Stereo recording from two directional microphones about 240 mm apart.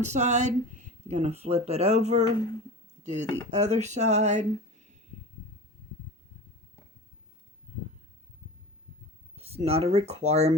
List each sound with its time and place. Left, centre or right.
0.0 s speech: right
9.3 s speech: right